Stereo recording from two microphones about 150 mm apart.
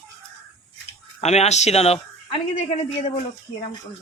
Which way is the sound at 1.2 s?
45° left (ahead or behind).